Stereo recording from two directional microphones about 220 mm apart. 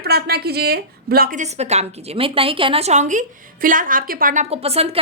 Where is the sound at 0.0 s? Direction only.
45° right (ahead or behind).